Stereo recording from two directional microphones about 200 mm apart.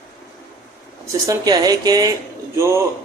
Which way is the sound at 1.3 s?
20° right (ahead or behind).